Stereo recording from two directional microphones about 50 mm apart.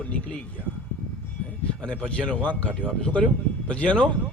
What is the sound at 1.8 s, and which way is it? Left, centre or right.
A man's voice, centre.